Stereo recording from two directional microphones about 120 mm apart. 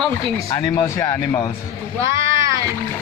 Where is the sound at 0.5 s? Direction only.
35° left (ahead or behind).